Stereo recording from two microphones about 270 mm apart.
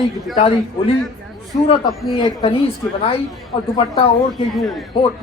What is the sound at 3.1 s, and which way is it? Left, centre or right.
Speech, centre.